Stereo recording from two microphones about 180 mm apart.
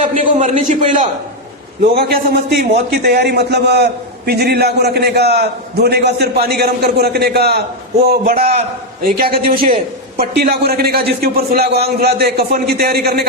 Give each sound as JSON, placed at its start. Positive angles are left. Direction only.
{"t": 0.1, "sound": "a man's voice", "side_deg": -40}
{"t": 1.8, "sound": "a man's voice", "side_deg": -60}